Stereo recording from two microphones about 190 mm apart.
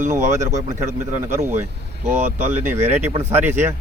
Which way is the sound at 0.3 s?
15° right (ahead or behind).